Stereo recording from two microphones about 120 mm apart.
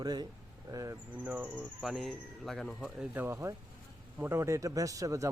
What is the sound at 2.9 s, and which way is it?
A man's voice, 15° right (ahead or behind).